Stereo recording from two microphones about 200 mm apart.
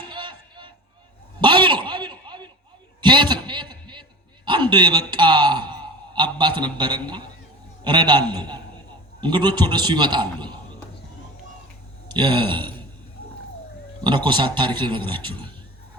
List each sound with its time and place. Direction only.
0.1 s music: 25° right (ahead or behind)
1.4 s a sound: 25° right (ahead or behind)
6.1 s a man's voice: 25° right (ahead or behind)
12.0 s speech: 20° right (ahead or behind)
14.3 s a man's voice: 25° right (ahead or behind)